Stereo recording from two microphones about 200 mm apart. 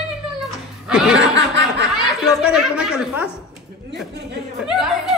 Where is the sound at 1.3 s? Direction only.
60° right (ahead or behind).